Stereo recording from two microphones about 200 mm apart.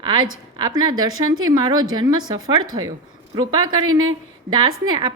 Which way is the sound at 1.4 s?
20° right (ahead or behind).